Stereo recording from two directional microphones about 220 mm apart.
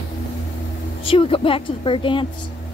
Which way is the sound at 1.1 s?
25° left (ahead or behind).